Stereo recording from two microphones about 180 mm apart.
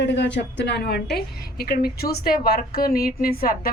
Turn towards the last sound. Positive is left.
turn(degrees=55)  # may be behind; listen again after turning